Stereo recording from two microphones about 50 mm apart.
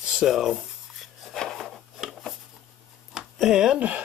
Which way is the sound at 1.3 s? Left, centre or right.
Centre.